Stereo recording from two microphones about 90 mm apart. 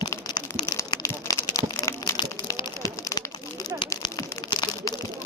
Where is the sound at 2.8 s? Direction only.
45° left (ahead or behind).